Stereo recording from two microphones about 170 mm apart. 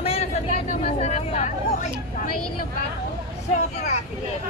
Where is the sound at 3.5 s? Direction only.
40° left (ahead or behind).